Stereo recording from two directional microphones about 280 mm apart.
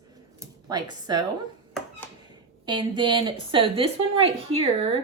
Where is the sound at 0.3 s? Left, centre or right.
Centre.